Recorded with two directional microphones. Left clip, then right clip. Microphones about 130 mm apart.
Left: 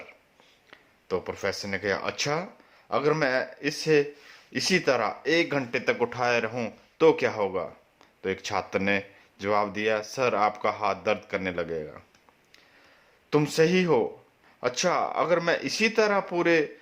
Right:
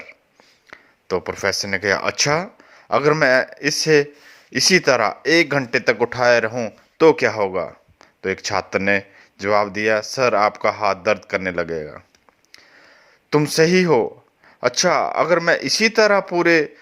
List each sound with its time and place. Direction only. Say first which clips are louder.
0.7 s speech: right 7 dB; 55° right (ahead or behind)
13.3 s speech: right 7 dB; 50° right (ahead or behind)